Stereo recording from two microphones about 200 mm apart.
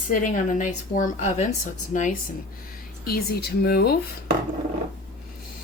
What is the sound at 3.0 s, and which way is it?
Speech, 50° left (ahead or behind).